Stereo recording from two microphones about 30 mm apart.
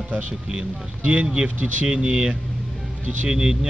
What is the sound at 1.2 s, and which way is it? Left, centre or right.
Speech, right.